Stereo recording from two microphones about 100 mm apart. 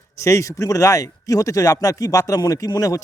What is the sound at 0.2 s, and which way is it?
Speech, 30° left (ahead or behind).